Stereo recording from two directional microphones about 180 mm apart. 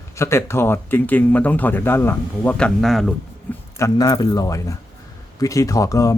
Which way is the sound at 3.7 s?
20° left (ahead or behind).